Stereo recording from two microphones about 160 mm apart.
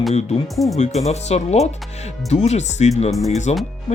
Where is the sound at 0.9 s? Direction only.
45° left (ahead or behind).